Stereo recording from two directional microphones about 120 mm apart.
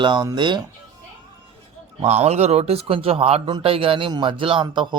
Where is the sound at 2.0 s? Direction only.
65° right (ahead or behind).